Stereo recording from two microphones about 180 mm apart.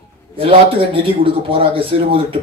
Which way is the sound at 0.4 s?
30° right (ahead or behind).